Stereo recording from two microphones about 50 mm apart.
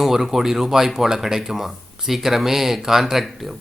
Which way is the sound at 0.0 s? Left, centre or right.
Centre.